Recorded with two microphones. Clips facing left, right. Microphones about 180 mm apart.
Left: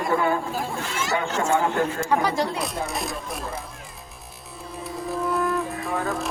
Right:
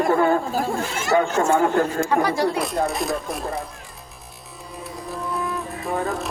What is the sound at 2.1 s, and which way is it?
Speech, 20° left (ahead or behind).